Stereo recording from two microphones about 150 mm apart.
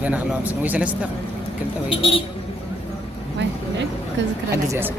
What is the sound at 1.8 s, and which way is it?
Speech, 40° left (ahead or behind).